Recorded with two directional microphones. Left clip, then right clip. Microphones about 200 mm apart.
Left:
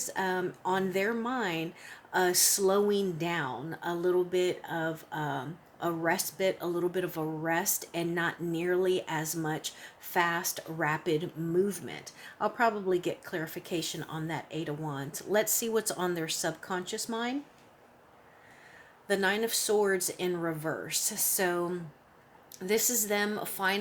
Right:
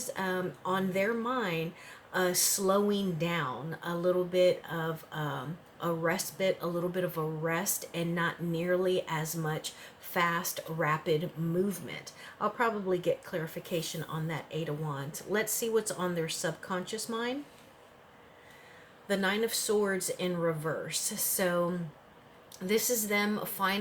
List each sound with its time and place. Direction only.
0.0 s speech: 45° left (ahead or behind)
19.0 s speech: 45° left (ahead or behind)